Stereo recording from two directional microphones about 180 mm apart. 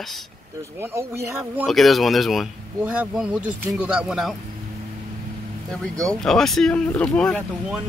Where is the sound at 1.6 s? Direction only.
Centre (ahead or behind).